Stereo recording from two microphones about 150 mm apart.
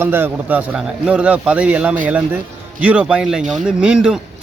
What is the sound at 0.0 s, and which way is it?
A man's voice, 15° right (ahead or behind).